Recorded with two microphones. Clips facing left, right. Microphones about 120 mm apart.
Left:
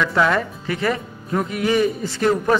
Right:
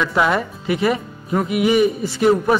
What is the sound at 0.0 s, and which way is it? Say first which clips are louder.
A man's voice: even; 15° right (ahead or behind).